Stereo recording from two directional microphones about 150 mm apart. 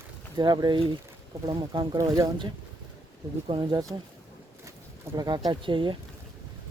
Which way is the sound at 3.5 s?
30° right (ahead or behind).